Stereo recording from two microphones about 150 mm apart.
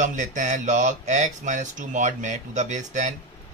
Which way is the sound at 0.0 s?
55° right (ahead or behind).